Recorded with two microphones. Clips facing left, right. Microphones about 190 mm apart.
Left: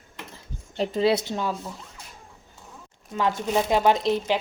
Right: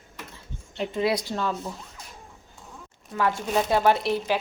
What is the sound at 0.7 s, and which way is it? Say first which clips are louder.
Speech: left 3 dB; 35° left (ahead or behind).